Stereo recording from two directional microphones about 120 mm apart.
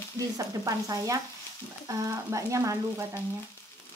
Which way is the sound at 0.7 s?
30° right (ahead or behind).